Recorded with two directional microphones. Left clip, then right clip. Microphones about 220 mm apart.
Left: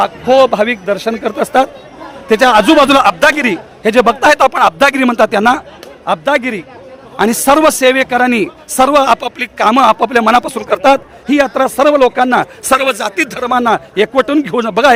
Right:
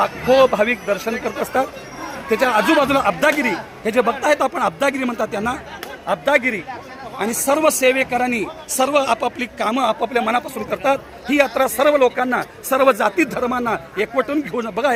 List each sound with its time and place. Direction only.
0.0 s a man's voice: 50° left (ahead or behind)